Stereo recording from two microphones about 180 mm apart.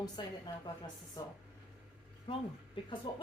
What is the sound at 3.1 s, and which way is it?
Speech, 20° left (ahead or behind).